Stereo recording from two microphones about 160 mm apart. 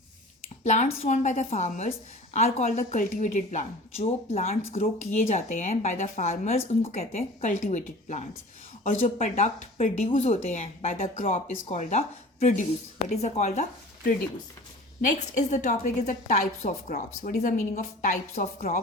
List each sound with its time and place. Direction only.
0.6 s a woman's voice: 50° left (ahead or behind)
2.6 s a woman's voice: 55° left (ahead or behind)
4.8 s a woman's voice: 50° left (ahead or behind)
9.3 s a woman's voice: 45° left (ahead or behind)
15.0 s a woman's voice: 50° left (ahead or behind)
16.9 s speech: 60° left (ahead or behind)
18.3 s speech: 65° left (ahead or behind)